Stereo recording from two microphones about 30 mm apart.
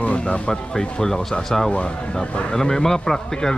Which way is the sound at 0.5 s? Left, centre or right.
Left.